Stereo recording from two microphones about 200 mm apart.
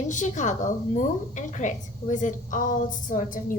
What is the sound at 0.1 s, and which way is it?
A woman's voice, 40° left (ahead or behind).